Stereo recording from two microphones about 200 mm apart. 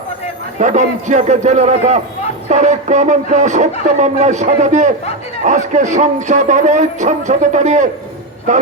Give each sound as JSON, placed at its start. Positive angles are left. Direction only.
{"t": 0.6, "sound": "a man's voice", "side_deg": -40}